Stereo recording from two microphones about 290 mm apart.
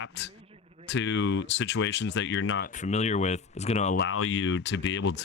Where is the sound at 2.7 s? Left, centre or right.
Left.